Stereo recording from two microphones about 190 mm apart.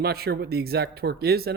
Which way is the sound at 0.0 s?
55° right (ahead or behind).